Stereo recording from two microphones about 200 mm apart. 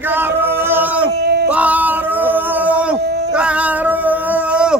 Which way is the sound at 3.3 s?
5° right (ahead or behind).